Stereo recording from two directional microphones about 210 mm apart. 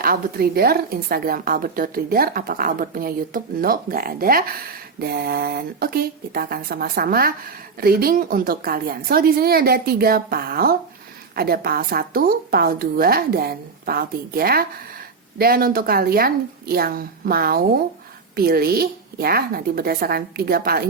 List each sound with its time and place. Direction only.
0.0 s speech: 45° right (ahead or behind)